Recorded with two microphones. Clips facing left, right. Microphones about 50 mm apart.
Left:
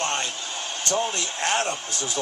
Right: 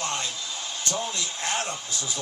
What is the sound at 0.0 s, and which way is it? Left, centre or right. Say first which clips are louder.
Speech: left 3 dB; left.